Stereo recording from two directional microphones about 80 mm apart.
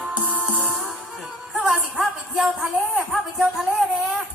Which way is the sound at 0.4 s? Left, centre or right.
Centre.